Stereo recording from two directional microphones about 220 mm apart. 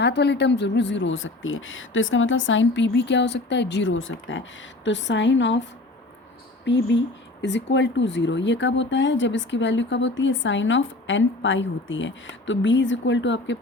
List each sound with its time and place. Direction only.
0.0 s speech: 50° left (ahead or behind)
6.7 s speech: 55° left (ahead or behind)